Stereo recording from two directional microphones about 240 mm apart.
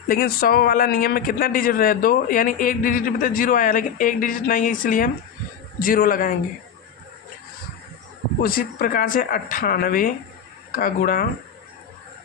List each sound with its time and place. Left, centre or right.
0.1 s a man's voice: left
8.4 s a man's voice: left